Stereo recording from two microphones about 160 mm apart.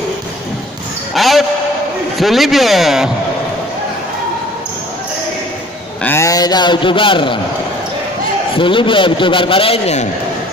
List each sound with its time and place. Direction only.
1.1 s speech: centre (ahead or behind)
6.0 s a man's voice: 20° left (ahead or behind)
8.5 s a man's voice: 30° left (ahead or behind)